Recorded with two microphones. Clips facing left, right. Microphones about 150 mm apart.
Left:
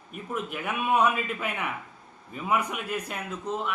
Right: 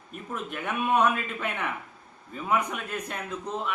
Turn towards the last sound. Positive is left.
turn(degrees=5)  # may be behind; listen again after turning